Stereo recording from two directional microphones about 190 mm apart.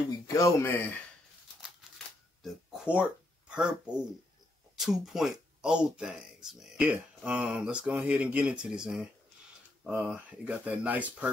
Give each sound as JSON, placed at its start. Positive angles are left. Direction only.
{"t": 0.1, "sound": "speech", "side_deg": 15}
{"t": 2.4, "sound": "speech", "side_deg": 0}